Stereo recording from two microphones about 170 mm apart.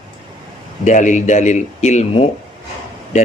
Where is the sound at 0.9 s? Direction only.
45° left (ahead or behind).